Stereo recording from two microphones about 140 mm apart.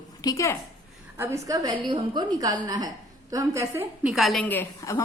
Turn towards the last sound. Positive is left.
turn(degrees=20)  # may be behind; listen again after turning